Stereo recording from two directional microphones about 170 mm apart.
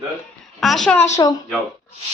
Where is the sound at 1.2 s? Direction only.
20° left (ahead or behind).